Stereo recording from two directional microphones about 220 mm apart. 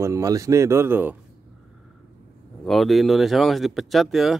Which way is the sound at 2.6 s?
Centre (ahead or behind).